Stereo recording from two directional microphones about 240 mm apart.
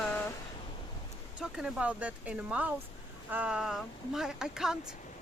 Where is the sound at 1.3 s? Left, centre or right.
Centre.